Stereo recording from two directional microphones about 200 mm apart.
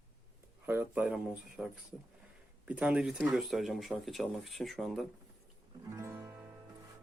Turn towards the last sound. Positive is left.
turn(degrees=-10)  # may be behind; listen again after turning